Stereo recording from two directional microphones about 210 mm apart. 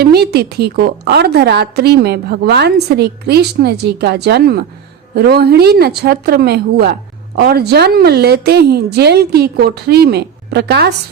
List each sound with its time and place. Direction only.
0.0 s a woman's voice: 50° right (ahead or behind)